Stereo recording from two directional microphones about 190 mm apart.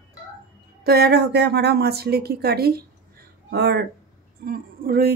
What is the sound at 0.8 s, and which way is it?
A woman's voice, 55° right (ahead or behind).